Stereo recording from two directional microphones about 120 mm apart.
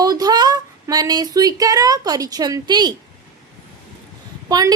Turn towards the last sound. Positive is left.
turn(degrees=-35)  # may be behind; listen again after turning